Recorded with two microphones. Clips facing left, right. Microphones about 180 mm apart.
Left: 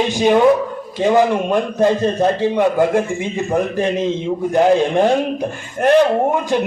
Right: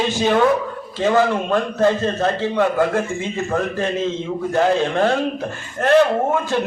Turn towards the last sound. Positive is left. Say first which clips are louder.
# left 3 dB
turn(degrees=15)  # may be behind; listen again after turning